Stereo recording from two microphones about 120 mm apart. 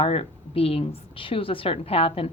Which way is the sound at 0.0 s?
55° left (ahead or behind).